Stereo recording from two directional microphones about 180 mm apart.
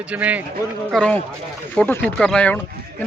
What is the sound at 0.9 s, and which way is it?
A man's voice, centre (ahead or behind).